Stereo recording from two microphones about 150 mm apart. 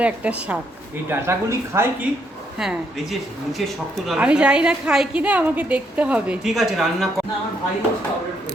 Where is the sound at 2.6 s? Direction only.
Centre (ahead or behind).